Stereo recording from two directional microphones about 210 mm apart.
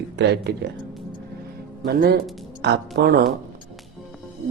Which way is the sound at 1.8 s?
50° right (ahead or behind).